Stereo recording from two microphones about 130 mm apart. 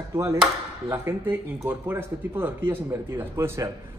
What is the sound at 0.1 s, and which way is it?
A man's voice, 20° right (ahead or behind).